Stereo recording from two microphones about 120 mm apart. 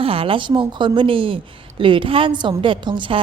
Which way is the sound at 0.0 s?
50° right (ahead or behind).